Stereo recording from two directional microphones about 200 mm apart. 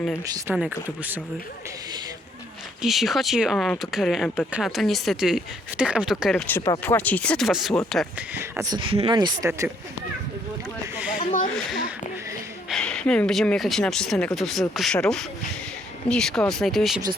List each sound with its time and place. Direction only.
0.5 s speech: 5° right (ahead or behind)
2.8 s speech: centre (ahead or behind)
6.5 s speech: 10° left (ahead or behind)
8.4 s speech: 15° right (ahead or behind)
9.5 s speech: 10° right (ahead or behind)
10.9 s a sound: 5° right (ahead or behind)
12.6 s speech: 5° left (ahead or behind)